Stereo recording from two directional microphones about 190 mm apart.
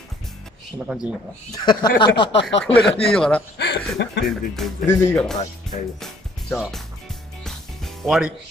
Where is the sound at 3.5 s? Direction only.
60° left (ahead or behind).